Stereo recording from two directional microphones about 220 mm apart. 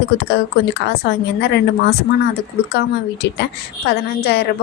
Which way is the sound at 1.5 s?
45° left (ahead or behind).